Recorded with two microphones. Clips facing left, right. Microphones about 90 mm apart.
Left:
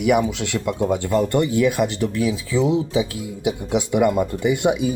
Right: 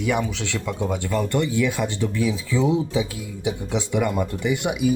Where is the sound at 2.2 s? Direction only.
15° left (ahead or behind).